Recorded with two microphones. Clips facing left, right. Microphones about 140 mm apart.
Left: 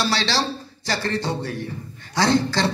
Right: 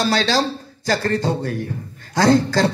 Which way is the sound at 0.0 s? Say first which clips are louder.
Right 4 dB; 45° right (ahead or behind).